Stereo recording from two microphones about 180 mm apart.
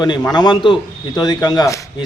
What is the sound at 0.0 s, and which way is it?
A man's voice, 25° left (ahead or behind).